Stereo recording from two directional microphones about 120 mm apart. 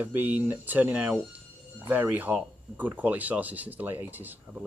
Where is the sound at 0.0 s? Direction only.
15° right (ahead or behind).